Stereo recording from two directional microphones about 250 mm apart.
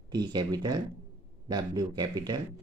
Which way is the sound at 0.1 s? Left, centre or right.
Centre.